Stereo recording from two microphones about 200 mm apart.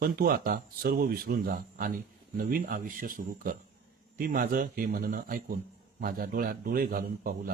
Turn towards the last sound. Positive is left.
turn(degrees=-45)  # may be behind; listen again after turning